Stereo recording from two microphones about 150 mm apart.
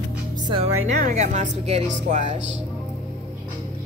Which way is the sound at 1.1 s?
50° right (ahead or behind).